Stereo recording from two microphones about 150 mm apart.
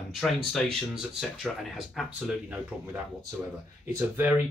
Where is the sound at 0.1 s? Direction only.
Centre (ahead or behind).